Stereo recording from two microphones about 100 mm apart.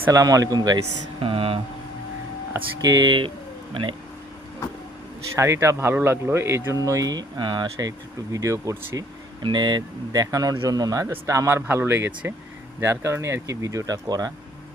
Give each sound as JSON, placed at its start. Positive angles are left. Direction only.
{"t": 0.1, "sound": "speech", "side_deg": -35}
{"t": 1.2, "sound": "speech", "side_deg": -65}
{"t": 2.8, "sound": "speech", "side_deg": -40}
{"t": 5.4, "sound": "speech", "side_deg": -30}
{"t": 9.4, "sound": "speech", "side_deg": -50}